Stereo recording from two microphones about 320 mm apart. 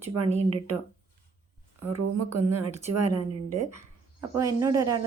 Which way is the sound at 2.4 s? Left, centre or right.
Centre.